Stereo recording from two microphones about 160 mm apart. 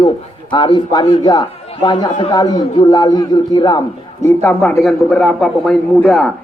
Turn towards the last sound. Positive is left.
turn(degrees=5)  # may be behind; listen again after turning